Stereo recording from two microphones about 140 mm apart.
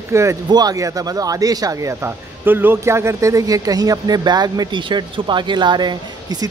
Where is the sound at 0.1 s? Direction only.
20° right (ahead or behind).